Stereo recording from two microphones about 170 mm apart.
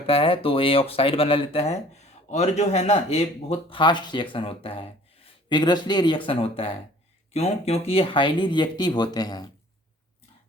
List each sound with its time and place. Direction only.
0.1 s speech: 30° left (ahead or behind)